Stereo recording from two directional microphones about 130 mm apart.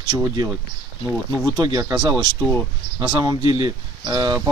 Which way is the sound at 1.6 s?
30° right (ahead or behind).